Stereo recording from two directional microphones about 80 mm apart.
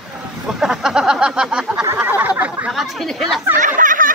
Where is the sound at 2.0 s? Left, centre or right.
Right.